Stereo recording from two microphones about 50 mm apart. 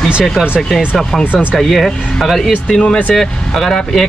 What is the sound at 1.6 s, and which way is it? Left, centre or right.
Speech, centre.